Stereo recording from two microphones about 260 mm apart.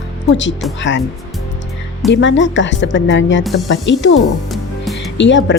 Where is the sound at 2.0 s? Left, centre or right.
Left.